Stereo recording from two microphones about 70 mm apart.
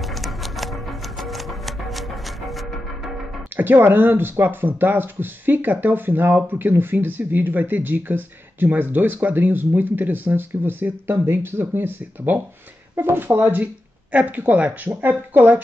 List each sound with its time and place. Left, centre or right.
0.0 s music: centre
3.5 s speech: right